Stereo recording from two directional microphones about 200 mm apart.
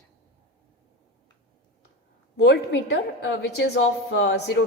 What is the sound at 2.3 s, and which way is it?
A woman's voice, 60° left (ahead or behind).